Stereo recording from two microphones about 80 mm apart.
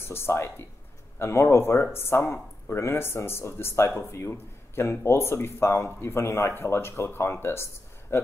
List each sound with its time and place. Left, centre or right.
0.0 s speech: left